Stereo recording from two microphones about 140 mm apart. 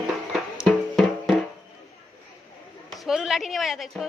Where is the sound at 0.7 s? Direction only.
Centre (ahead or behind).